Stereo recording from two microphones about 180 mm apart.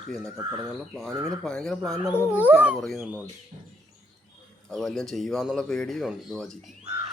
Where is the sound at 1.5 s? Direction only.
Centre (ahead or behind).